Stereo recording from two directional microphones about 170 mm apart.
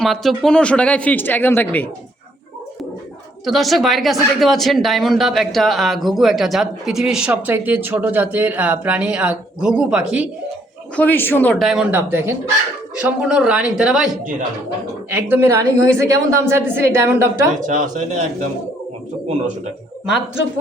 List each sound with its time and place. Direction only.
0.0 s speech: centre (ahead or behind)
3.4 s speech: centre (ahead or behind)
10.9 s speech: 10° left (ahead or behind)
11.6 s speech: 5° right (ahead or behind)
15.1 s a woman's voice: 10° right (ahead or behind)
17.6 s speech: 50° right (ahead or behind)